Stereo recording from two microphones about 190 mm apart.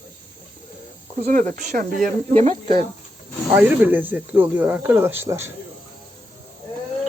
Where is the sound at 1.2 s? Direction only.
40° right (ahead or behind).